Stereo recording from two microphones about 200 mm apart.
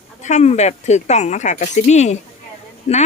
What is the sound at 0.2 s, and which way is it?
A woman's voice, 35° left (ahead or behind).